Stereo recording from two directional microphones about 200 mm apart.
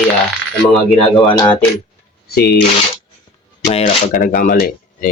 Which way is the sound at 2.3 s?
50° left (ahead or behind).